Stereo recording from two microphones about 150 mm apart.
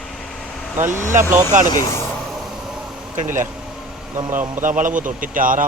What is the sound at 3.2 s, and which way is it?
Speech, 60° right (ahead or behind).